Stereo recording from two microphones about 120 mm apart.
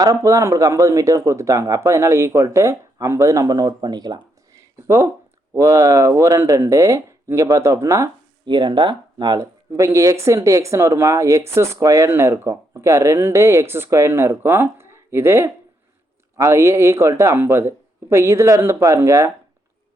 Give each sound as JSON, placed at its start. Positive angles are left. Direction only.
{"t": 0.0, "sound": "speech", "side_deg": -30}
{"t": 8.4, "sound": "speech", "side_deg": -40}